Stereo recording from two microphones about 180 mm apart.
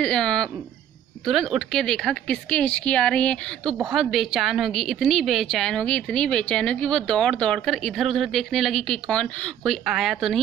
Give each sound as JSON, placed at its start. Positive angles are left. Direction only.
{"t": 0.0, "sound": "a woman's voice", "side_deg": 5}